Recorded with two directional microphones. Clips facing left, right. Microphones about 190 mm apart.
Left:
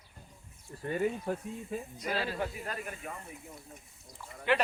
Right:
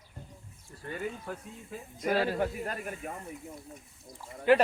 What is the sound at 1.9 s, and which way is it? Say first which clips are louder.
Speech: right 8 dB; 50° right (ahead or behind).